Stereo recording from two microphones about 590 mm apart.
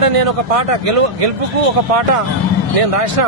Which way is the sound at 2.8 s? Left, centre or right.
Right.